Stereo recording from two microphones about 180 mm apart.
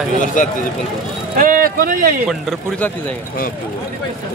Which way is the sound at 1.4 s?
50° right (ahead or behind).